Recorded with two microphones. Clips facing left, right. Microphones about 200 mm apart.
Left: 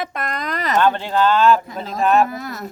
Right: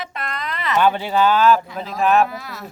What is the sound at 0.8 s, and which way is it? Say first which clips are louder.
Speech: right 1 dB; 10° right (ahead or behind).